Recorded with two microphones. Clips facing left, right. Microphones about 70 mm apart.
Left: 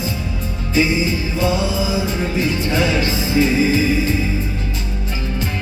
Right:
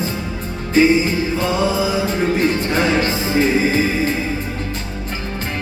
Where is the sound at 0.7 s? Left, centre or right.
Right.